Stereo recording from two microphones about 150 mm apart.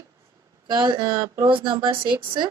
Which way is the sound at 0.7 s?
30° right (ahead or behind).